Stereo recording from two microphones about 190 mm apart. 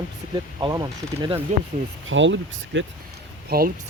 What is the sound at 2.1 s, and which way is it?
Speech, 75° right (ahead or behind).